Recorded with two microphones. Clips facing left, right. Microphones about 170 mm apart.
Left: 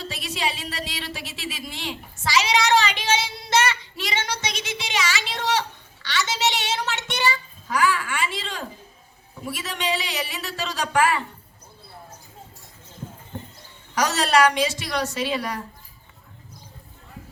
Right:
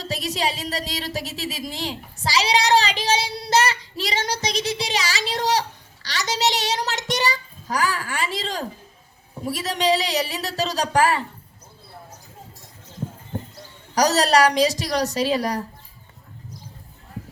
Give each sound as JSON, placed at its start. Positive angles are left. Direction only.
{"t": 0.0, "sound": "a sound", "side_deg": -40}
{"t": 9.5, "sound": "speech", "side_deg": -35}
{"t": 13.3, "sound": "music", "side_deg": -40}
{"t": 13.9, "sound": "speech", "side_deg": -40}